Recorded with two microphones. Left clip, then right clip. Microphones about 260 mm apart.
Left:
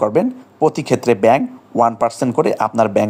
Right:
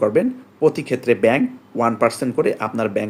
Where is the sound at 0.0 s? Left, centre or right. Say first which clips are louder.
Left 2 dB; left.